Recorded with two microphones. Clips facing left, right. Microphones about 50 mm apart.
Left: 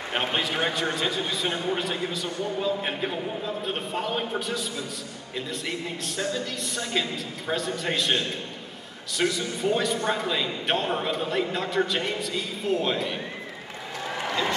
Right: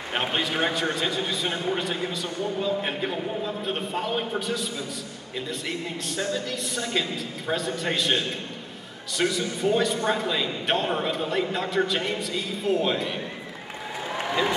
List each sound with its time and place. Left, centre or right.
0.1 s a man's voice: centre